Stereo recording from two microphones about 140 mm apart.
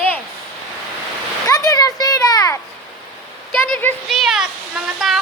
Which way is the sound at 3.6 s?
10° left (ahead or behind).